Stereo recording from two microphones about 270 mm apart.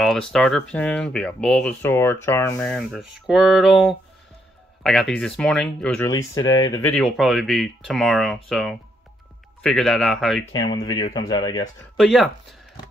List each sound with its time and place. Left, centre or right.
0.0 s speech: centre
5.1 s speech: centre
7.0 s speech: centre
10.5 s speech: centre
12.0 s speech: centre